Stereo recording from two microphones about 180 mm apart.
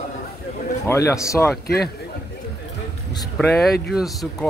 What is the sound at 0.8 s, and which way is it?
Speech, 15° left (ahead or behind).